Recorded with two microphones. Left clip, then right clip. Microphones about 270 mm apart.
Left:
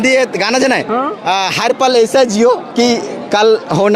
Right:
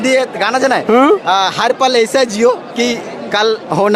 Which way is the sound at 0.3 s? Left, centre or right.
Left.